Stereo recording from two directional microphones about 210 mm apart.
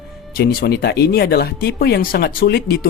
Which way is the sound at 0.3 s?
50° left (ahead or behind).